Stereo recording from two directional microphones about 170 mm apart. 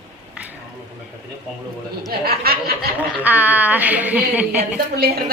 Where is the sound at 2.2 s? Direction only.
65° right (ahead or behind).